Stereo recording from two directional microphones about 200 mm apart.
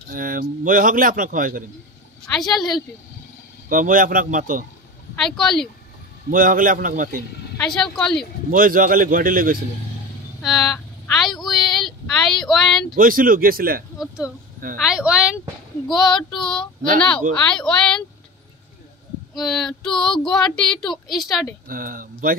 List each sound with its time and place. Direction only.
0.1 s speech: 45° right (ahead or behind)
2.3 s speech: centre (ahead or behind)
3.6 s speech: 40° right (ahead or behind)
5.1 s speech: 5° left (ahead or behind)
6.3 s speech: 45° right (ahead or behind)
7.5 s speech: centre (ahead or behind)
8.5 s speech: 45° right (ahead or behind)
10.4 s a sound: centre (ahead or behind)
12.9 s speech: 45° right (ahead or behind)
13.9 s speech: 5° right (ahead or behind)
17.4 s speech: 5° left (ahead or behind)
19.3 s speech: centre (ahead or behind)
21.6 s speech: 45° right (ahead or behind)